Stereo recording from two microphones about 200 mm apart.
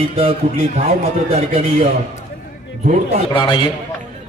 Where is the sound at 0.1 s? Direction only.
30° right (ahead or behind).